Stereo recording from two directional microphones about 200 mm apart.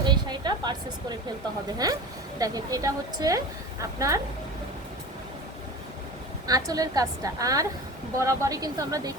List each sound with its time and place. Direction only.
0.0 s a sound: 20° right (ahead or behind)
1.8 s a woman's voice: 20° right (ahead or behind)
6.5 s a woman's voice: 20° right (ahead or behind)